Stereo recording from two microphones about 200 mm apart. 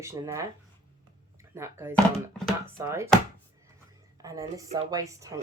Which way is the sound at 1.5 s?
10° right (ahead or behind).